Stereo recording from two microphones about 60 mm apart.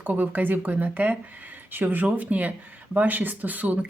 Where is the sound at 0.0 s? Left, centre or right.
Right.